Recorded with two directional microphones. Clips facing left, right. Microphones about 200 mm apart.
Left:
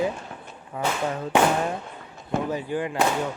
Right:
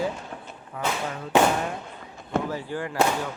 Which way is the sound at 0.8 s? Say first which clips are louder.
Left 2 dB; 25° left (ahead or behind).